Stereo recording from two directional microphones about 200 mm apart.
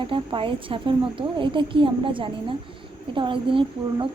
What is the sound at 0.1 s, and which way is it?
Speech, 25° right (ahead or behind).